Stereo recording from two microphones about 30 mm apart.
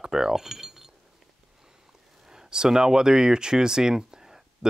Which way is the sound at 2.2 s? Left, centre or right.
Right.